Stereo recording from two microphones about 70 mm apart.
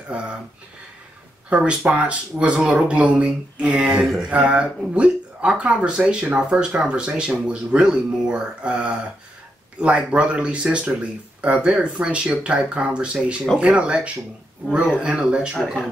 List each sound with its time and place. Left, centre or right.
0.1 s speech: centre
1.5 s speech: centre
3.9 s speech: centre
4.3 s speech: centre